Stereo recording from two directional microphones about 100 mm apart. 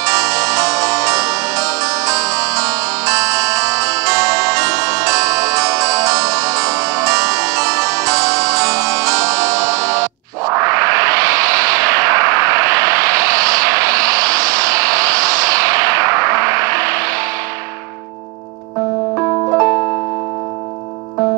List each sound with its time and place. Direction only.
0.0 s music: 35° right (ahead or behind)